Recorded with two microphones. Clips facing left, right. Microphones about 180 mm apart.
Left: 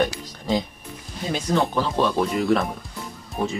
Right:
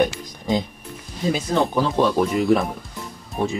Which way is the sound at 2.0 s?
15° right (ahead or behind).